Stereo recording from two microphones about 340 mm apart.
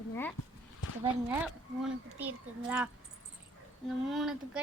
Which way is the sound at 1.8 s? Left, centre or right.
Centre.